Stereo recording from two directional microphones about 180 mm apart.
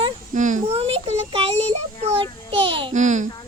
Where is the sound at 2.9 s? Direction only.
40° right (ahead or behind).